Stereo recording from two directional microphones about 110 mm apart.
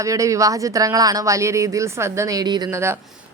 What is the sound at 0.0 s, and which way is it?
Speech, 30° right (ahead or behind).